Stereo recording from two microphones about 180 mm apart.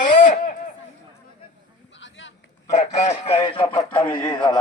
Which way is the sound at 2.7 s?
40° left (ahead or behind).